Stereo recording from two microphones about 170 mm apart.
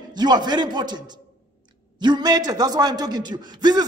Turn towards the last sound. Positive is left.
turn(degrees=-25)  # may be behind; listen again after turning